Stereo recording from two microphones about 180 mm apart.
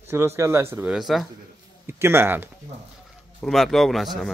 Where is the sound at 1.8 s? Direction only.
15° right (ahead or behind).